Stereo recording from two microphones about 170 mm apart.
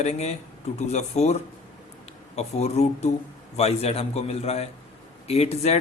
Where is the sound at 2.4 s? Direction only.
40° left (ahead or behind).